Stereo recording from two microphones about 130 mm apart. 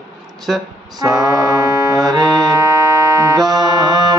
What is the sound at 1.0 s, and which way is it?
Music, 25° right (ahead or behind).